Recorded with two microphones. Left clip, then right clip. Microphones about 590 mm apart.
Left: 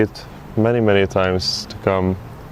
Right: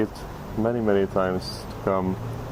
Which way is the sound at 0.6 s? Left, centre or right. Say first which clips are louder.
Left 7 dB; left.